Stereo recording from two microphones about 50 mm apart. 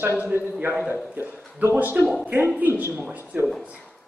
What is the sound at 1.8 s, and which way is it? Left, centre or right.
Speech, right.